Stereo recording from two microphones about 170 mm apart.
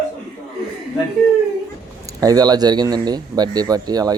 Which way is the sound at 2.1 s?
20° right (ahead or behind).